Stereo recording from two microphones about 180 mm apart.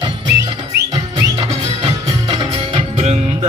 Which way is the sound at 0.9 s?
25° right (ahead or behind).